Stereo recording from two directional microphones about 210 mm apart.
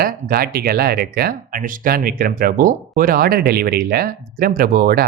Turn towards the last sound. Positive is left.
turn(degrees=-45)  # may be behind; listen again after turning